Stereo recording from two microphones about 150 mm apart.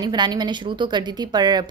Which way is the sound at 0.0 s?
30° right (ahead or behind).